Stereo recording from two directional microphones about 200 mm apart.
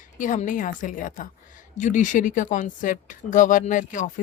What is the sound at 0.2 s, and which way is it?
A woman's voice, 40° left (ahead or behind).